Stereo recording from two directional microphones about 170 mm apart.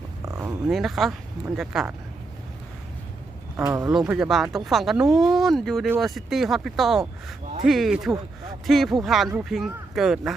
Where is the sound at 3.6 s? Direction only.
20° right (ahead or behind).